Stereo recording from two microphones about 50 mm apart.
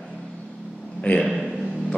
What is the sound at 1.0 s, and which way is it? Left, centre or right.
Speech, left.